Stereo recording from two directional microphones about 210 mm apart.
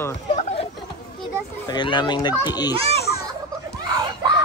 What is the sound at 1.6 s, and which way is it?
Speech, 20° left (ahead or behind).